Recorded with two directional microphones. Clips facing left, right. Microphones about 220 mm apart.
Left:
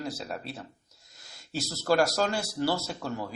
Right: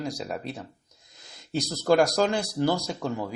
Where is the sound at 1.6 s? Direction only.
15° right (ahead or behind).